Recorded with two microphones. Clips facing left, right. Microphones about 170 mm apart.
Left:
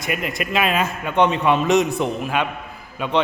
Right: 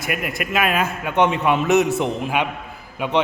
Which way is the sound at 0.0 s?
5° right (ahead or behind).